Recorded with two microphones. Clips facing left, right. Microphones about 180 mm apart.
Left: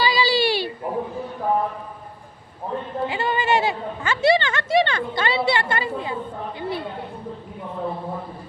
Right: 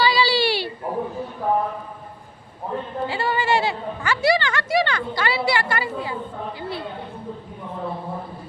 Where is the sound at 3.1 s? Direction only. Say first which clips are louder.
Even; 20° left (ahead or behind).